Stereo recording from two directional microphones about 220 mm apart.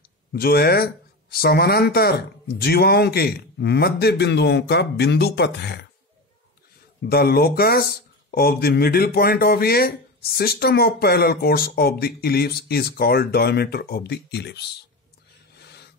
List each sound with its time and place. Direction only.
0.3 s speech: 45° left (ahead or behind)
7.1 s speech: 45° left (ahead or behind)
15.6 s a sound: 50° left (ahead or behind)